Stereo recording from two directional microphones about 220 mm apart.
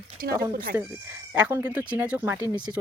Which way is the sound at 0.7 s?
10° right (ahead or behind).